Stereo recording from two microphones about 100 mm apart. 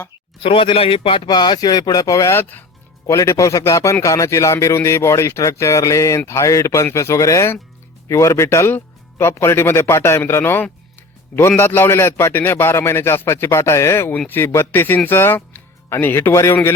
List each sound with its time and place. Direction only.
0.4 s speech: 60° left (ahead or behind)
1.3 s speech: 45° left (ahead or behind); by 2.6 s 20° left (ahead or behind)
3.1 s a man's voice: 30° left (ahead or behind)